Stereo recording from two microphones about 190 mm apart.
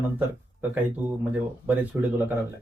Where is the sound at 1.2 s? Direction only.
10° right (ahead or behind).